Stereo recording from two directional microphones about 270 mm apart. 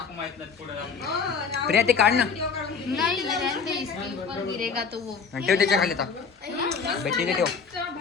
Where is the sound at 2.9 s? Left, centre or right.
Centre.